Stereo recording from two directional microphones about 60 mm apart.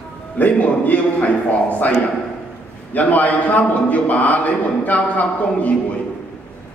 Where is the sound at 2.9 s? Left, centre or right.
Left.